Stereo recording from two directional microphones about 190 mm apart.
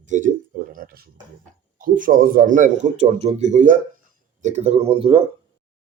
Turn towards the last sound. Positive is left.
turn(degrees=-30)  # may be behind; listen again after turning